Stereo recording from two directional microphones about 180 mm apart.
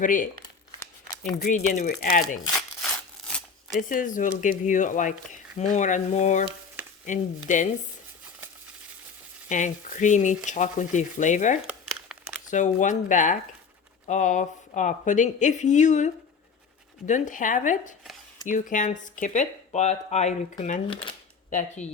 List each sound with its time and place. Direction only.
0.0 s speech: 45° left (ahead or behind)
1.4 s speech: 45° left (ahead or behind)
2.8 s a sound: 5° left (ahead or behind)
3.8 s speech: 45° left (ahead or behind)
9.5 s speech: 45° left (ahead or behind)
11.6 s crumpling: 5° right (ahead or behind)
12.5 s speech: 45° left (ahead or behind)
20.9 s speech: 30° left (ahead or behind)